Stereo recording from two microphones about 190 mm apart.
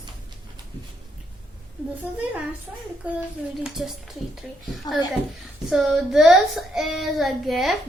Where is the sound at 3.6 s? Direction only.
Centre (ahead or behind).